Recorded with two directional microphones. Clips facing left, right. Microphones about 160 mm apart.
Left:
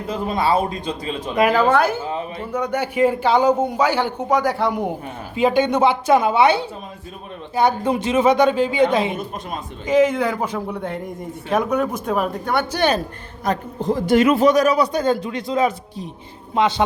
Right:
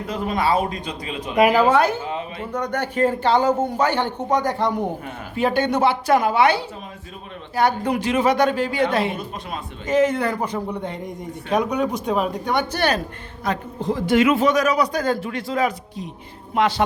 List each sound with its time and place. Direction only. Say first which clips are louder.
0.1 s speech: left 2 dB; 30° left (ahead or behind)
1.4 s a man's voice: right 1 dB; 10° right (ahead or behind)
13.4 s a man's voice: left 2 dB; 45° left (ahead or behind); by 16.8 s 20° left (ahead or behind)